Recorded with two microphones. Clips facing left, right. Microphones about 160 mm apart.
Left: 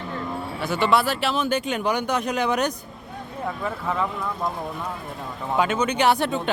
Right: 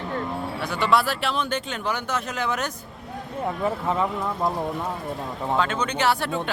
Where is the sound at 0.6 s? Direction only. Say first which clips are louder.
Left 2 dB; centre (ahead or behind); by 2.7 s 20° left (ahead or behind).